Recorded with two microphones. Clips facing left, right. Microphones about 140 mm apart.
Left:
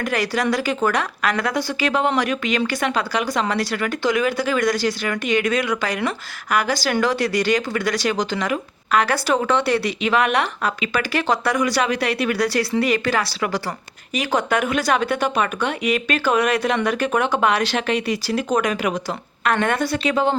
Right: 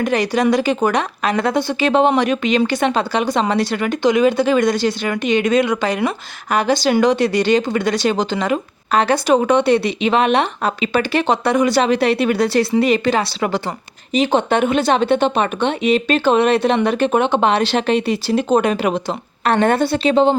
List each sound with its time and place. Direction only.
0.0 s speech: 20° right (ahead or behind)